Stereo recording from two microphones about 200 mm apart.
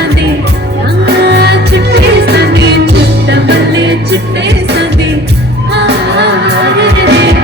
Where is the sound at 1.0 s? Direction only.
55° right (ahead or behind).